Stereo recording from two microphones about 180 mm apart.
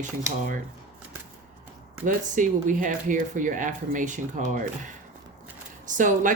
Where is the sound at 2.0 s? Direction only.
45° right (ahead or behind).